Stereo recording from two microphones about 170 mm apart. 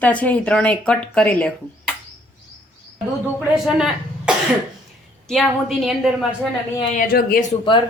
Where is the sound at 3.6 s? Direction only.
5° right (ahead or behind).